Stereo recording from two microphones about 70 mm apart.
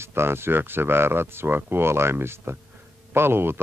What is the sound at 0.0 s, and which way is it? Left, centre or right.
Speech, right.